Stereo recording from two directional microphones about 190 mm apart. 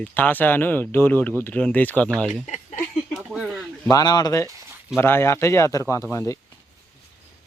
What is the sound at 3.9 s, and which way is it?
Speech, 20° left (ahead or behind).